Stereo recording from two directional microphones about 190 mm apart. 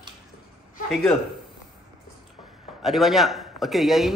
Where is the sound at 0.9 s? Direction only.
Centre (ahead or behind).